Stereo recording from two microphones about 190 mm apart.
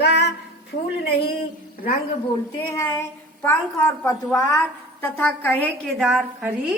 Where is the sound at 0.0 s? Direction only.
60° left (ahead or behind).